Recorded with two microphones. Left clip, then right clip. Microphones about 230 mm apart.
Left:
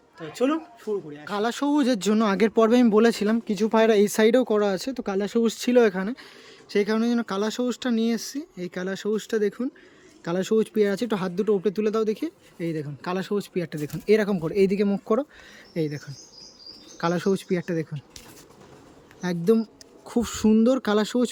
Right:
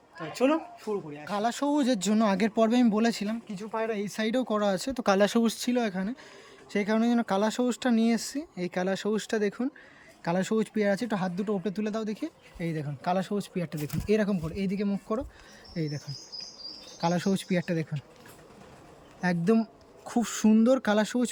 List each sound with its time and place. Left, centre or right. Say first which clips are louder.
0.2 s speech: left 1 dB; centre
3.5 s speech: left 12 dB; left
4.1 s speech: left 9 dB; centre
17.0 s speech: left 4 dB; centre
19.2 s speech: left 4 dB; centre